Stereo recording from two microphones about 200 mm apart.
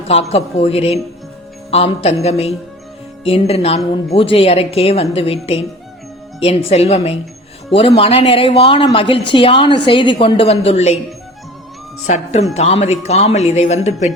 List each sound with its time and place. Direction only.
0.1 s speech: 30° left (ahead or behind)
12.0 s speech: 35° left (ahead or behind)